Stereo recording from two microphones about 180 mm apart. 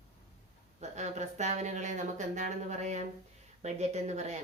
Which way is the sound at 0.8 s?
40° right (ahead or behind).